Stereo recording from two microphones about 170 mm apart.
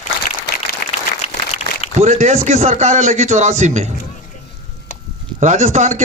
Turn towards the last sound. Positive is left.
turn(degrees=-45)  # may be behind; listen again after turning